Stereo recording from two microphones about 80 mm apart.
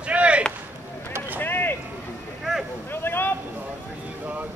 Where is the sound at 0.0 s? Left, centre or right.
Centre.